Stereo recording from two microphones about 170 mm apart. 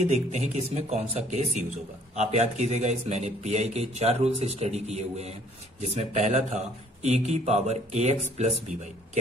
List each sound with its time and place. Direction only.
0.0 s speech: 40° right (ahead or behind)